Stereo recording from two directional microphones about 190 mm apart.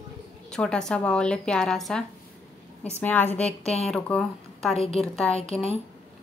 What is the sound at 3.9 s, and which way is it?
A woman's voice, centre (ahead or behind).